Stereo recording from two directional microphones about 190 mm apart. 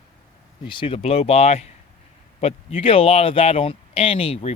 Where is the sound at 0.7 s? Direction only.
25° left (ahead or behind).